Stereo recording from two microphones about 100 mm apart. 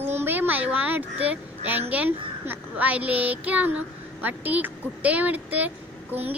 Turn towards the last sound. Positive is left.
turn(degrees=-15)  # may be behind; listen again after turning